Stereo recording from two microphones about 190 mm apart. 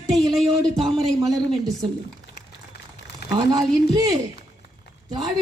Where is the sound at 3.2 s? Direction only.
55° left (ahead or behind).